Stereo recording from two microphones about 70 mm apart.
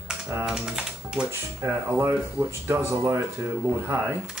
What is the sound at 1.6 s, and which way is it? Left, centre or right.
Speech, right.